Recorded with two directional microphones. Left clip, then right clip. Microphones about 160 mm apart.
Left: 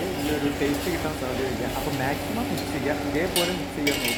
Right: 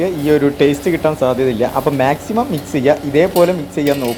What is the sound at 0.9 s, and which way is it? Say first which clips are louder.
Speech: right 11 dB; 45° right (ahead or behind).